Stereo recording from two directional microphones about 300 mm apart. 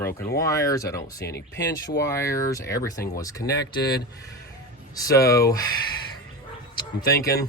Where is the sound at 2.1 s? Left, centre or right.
Centre.